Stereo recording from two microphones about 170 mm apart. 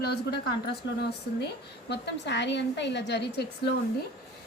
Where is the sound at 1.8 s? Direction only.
85° left.